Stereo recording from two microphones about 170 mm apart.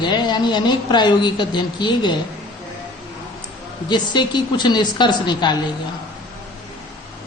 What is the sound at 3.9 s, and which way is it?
Speech, 25° left (ahead or behind).